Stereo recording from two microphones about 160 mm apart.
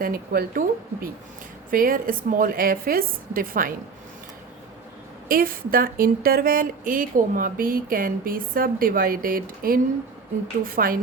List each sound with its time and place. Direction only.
0.0 s speech: 65° right (ahead or behind)
1.7 s speech: 60° right (ahead or behind)
5.3 s speech: 65° right (ahead or behind)